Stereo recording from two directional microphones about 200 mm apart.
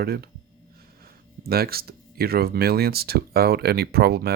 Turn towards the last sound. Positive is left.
turn(degrees=-50)  # may be behind; listen again after turning